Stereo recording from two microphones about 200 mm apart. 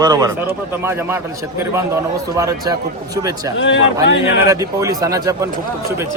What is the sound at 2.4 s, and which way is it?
Speech, 15° right (ahead or behind).